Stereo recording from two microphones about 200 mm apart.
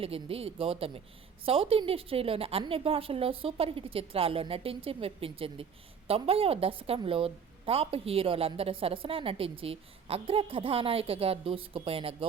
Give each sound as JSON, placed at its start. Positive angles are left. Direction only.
{"t": 0.0, "sound": "a woman's voice", "side_deg": -30}